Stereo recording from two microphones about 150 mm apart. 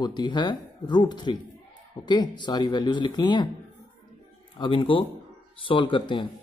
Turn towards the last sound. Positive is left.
turn(degrees=35)  # may be behind; listen again after turning